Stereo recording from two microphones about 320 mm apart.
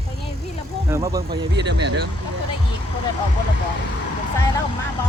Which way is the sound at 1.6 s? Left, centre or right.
Right.